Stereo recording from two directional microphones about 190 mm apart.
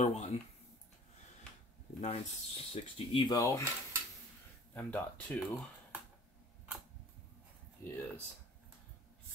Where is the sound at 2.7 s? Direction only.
25° left (ahead or behind).